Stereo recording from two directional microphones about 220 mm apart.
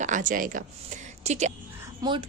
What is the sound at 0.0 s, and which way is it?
A woman's voice, 35° right (ahead or behind).